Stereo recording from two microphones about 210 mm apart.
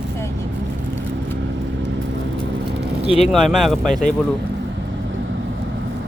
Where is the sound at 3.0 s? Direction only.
30° left (ahead or behind).